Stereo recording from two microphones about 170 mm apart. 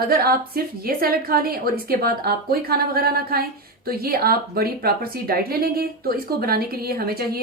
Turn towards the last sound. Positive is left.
turn(degrees=-65)  # may be behind; listen again after turning